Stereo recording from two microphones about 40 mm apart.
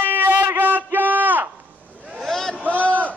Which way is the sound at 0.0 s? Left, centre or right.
Right.